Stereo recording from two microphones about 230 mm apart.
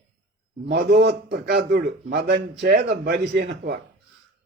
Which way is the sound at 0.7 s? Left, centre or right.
Right.